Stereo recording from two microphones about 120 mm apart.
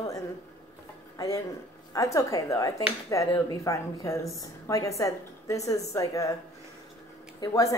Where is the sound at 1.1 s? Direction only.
30° left (ahead or behind).